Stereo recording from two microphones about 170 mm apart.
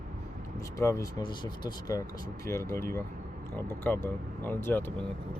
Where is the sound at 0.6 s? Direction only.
20° left (ahead or behind).